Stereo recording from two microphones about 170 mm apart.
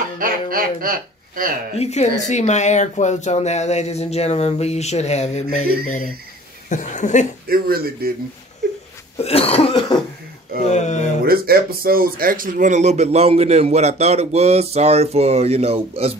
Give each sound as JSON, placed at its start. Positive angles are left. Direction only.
{"t": 0.2, "sound": "speech", "side_deg": -55}
{"t": 1.8, "sound": "speech", "side_deg": 40}
{"t": 7.4, "sound": "speech", "side_deg": -60}
{"t": 9.2, "sound": "speech", "side_deg": 35}
{"t": 10.7, "sound": "speech", "side_deg": 45}
{"t": 11.2, "sound": "a man's voice", "side_deg": -60}